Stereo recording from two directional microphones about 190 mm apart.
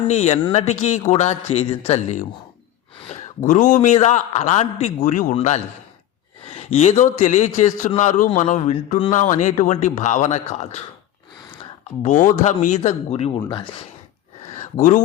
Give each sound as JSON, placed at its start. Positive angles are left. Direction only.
{"t": 0.1, "sound": "a man's voice", "side_deg": 35}
{"t": 12.0, "sound": "a man's voice", "side_deg": 40}
{"t": 14.5, "sound": "a sound", "side_deg": 40}